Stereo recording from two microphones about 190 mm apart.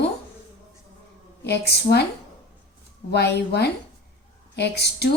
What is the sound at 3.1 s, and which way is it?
A woman's voice, 60° left (ahead or behind).